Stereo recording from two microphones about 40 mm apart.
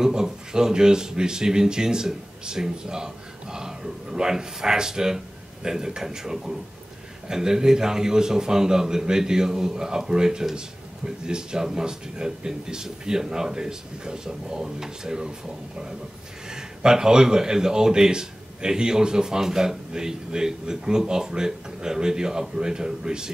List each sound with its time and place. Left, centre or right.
0.0 s speech: centre
16.4 s speech: centre